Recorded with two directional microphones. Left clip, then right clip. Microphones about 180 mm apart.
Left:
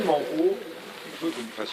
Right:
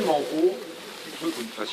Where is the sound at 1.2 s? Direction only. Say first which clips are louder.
Even; 40° left (ahead or behind).